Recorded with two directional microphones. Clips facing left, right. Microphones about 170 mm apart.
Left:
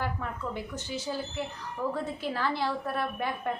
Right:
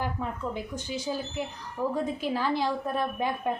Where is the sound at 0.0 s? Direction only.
15° right (ahead or behind).